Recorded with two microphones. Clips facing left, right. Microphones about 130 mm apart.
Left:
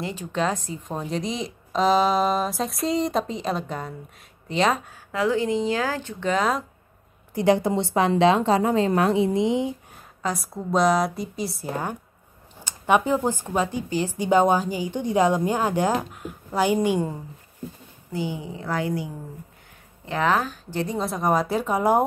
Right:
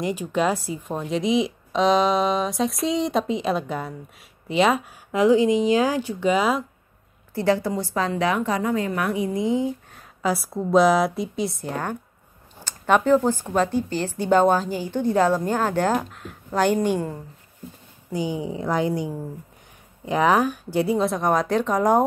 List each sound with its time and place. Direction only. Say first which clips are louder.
0.0 s a woman's voice: right 3 dB; 10° right (ahead or behind)
5.1 s speech: right 5 dB; 15° right (ahead or behind)
7.3 s speech: left 2 dB; 20° left (ahead or behind)
10.2 s a woman's voice: right 4 dB; centre (ahead or behind)
18.1 s speech: right 3 dB; 15° right (ahead or behind)
20.1 s a woman's voice: right 4 dB; 15° right (ahead or behind); by 22.0 s 10° left (ahead or behind)